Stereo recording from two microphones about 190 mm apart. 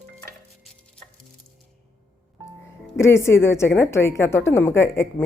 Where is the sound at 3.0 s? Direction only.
15° left (ahead or behind).